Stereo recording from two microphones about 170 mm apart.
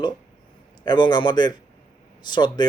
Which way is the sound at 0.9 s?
25° left (ahead or behind).